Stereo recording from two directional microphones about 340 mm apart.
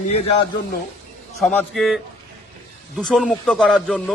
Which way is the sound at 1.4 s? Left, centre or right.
Centre.